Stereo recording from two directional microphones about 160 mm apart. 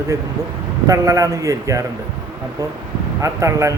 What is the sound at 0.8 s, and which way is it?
Speech, 20° right (ahead or behind).